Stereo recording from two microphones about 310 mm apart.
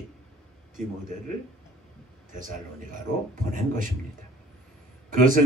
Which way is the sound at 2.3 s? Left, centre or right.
Right.